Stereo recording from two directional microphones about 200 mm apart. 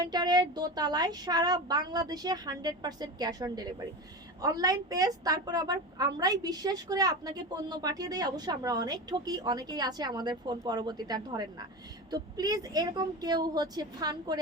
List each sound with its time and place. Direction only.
0.0 s a woman's voice: 20° right (ahead or behind)